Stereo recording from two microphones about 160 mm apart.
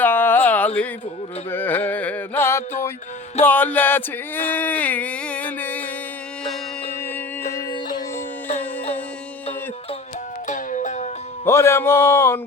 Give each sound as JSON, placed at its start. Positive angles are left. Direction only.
{"t": 0.0, "sound": "a sound", "side_deg": 10}
{"t": 3.4, "sound": "speech", "side_deg": 10}
{"t": 10.4, "sound": "music", "side_deg": 50}
{"t": 11.4, "sound": "a man's voice", "side_deg": 15}